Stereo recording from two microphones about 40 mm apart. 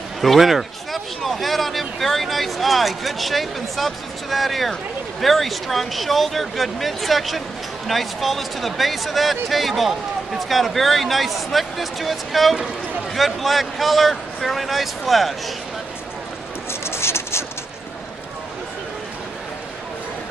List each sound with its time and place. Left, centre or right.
0.2 s speech: centre
16.8 s vehicle: left